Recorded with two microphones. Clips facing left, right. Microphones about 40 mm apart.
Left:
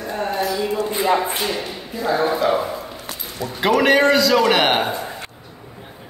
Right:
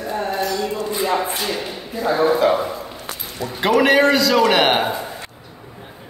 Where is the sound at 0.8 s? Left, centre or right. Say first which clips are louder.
Left 2 dB; left.